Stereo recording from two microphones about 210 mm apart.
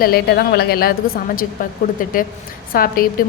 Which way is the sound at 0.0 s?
50° left (ahead or behind).